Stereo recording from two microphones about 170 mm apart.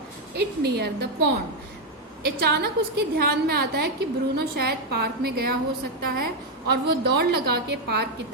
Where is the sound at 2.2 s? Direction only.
70° right (ahead or behind).